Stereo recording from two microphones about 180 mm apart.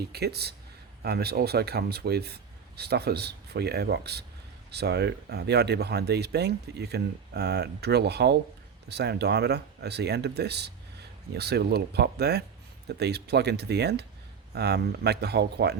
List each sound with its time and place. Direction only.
0.1 s speech: 65° right (ahead or behind)